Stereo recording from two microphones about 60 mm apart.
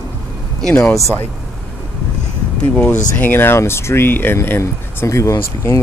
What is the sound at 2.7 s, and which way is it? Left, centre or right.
Speech, left.